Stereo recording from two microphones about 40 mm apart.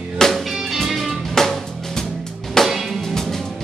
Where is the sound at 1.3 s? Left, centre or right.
Centre.